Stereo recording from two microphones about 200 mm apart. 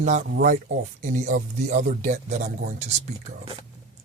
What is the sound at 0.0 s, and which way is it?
Speech, 35° right (ahead or behind).